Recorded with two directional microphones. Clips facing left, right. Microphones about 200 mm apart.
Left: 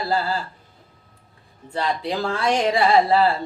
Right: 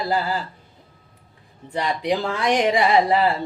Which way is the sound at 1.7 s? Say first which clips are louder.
Right 2 dB; 15° right (ahead or behind).